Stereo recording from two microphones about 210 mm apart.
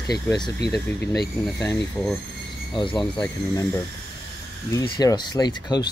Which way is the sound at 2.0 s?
5° left (ahead or behind).